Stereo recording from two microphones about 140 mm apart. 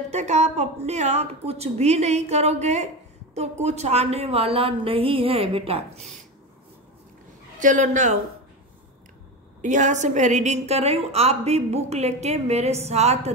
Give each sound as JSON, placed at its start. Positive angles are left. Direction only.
{"t": 0.1, "sound": "a woman's voice", "side_deg": -55}
{"t": 7.5, "sound": "speech", "side_deg": -65}
{"t": 9.6, "sound": "a woman's voice", "side_deg": -60}